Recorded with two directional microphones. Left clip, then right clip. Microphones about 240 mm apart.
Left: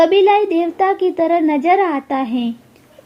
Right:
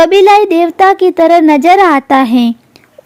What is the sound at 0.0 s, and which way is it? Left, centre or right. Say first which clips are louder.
A woman's voice: right 7 dB; right.